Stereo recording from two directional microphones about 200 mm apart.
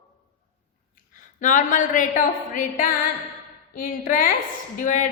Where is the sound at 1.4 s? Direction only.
40° left (ahead or behind).